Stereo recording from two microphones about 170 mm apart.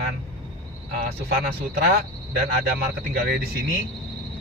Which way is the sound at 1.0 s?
65° right (ahead or behind).